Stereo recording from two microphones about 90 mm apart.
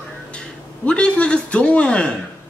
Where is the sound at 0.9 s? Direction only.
15° left (ahead or behind).